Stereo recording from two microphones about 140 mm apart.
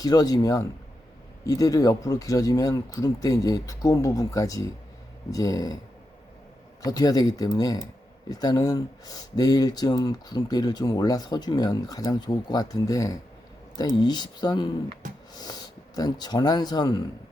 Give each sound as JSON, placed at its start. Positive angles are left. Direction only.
{"t": 0.0, "sound": "speech", "side_deg": 25}
{"t": 6.8, "sound": "speech", "side_deg": 25}